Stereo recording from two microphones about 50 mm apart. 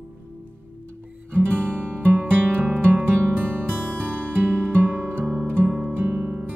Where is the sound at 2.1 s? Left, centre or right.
Right.